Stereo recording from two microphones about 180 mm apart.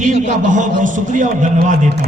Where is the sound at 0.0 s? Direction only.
45° right (ahead or behind).